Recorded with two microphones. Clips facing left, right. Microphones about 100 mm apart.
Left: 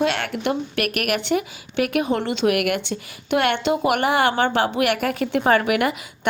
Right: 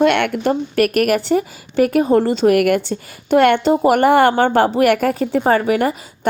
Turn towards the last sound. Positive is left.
turn(degrees=-35)  # may be behind; listen again after turning